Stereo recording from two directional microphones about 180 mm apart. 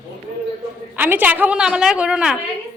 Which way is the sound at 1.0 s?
10° right (ahead or behind).